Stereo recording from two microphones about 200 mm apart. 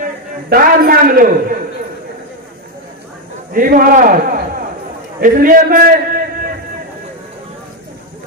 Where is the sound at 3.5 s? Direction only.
45° right (ahead or behind).